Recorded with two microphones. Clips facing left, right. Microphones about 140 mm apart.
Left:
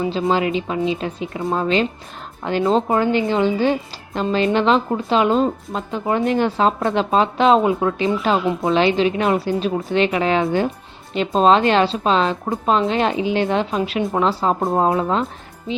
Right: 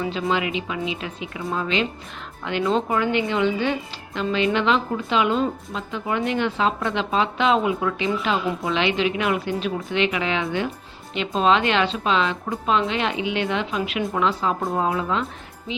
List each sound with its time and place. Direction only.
0.0 s speech: 30° left (ahead or behind)